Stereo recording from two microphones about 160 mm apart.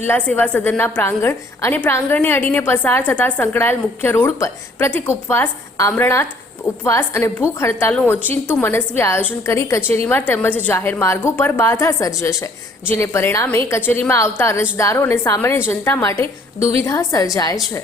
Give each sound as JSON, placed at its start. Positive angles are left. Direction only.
{"t": 0.0, "sound": "a woman's voice", "side_deg": 10}